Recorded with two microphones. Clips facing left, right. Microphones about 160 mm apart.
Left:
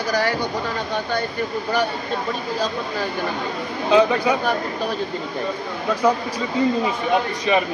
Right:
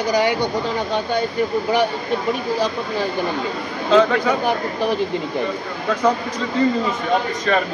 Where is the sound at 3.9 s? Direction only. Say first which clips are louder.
Right 1 dB; 15° left (ahead or behind).